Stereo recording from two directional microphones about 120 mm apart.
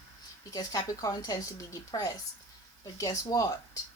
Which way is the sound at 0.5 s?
30° left (ahead or behind).